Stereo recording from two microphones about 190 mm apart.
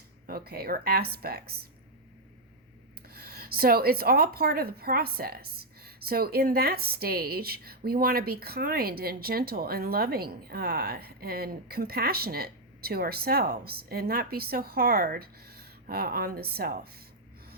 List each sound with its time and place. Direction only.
0.3 s speech: 55° right (ahead or behind)
3.1 s speech: 55° right (ahead or behind)